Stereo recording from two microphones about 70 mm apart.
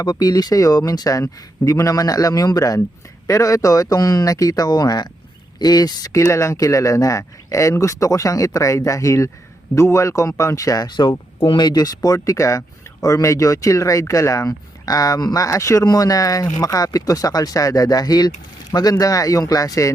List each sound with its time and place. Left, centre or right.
0.0 s speech: left
4.7 s speech: left
6.1 s speech: left
10.8 s speech: left